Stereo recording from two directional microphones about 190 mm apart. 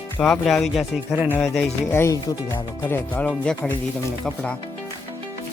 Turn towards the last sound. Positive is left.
turn(degrees=5)  # may be behind; listen again after turning